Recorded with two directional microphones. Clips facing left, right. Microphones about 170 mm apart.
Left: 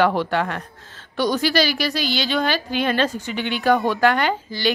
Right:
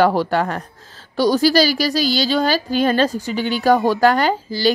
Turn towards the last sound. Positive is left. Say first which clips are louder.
# right 4 dB
turn(degrees=-35)  # may be behind; listen again after turning